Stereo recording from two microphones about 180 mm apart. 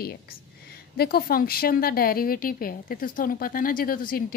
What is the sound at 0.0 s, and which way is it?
A woman's voice, 60° left (ahead or behind).